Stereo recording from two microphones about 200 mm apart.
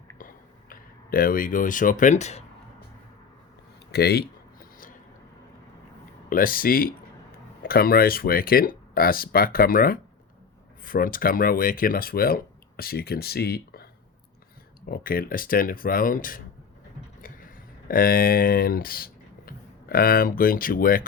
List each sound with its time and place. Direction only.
0.2 s a sound: 45° left (ahead or behind)
3.9 s speech: 50° left (ahead or behind)
6.3 s speech: 45° left (ahead or behind)
14.8 s speech: 45° left (ahead or behind)